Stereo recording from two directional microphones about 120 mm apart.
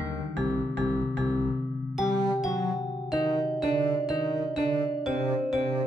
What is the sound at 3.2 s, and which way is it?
Music, 35° left (ahead or behind).